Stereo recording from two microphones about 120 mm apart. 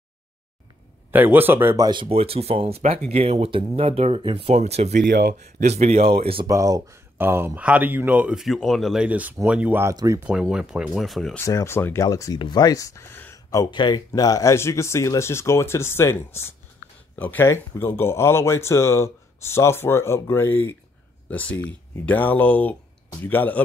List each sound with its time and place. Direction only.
1.1 s speech: 15° right (ahead or behind)
1.8 s speech: 40° right (ahead or behind)
2.0 s speech: 55° right (ahead or behind)
4.6 s speech: 60° right (ahead or behind)
6.4 s speech: 30° right (ahead or behind); by 9.0 s centre (ahead or behind)
9.0 s speech: 15° right (ahead or behind)
9.9 s speech: 25° right (ahead or behind)
10.2 s speech: 10° right (ahead or behind)
11.3 s speech: 25° left (ahead or behind)
13.7 s speech: 40° left (ahead or behind); by 23.6 s 15° left (ahead or behind)